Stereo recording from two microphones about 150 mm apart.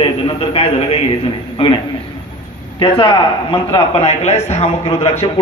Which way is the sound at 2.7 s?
35° left (ahead or behind).